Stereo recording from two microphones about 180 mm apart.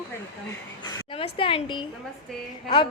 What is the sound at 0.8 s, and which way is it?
A woman's voice, 25° left (ahead or behind).